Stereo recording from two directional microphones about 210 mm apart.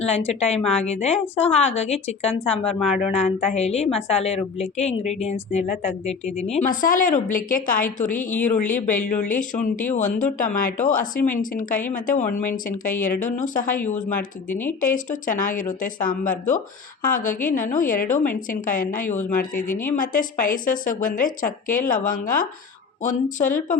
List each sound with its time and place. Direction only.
0.0 s a woman's voice: 30° left (ahead or behind)